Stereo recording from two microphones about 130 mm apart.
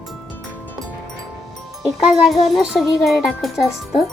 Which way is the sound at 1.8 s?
5° right (ahead or behind).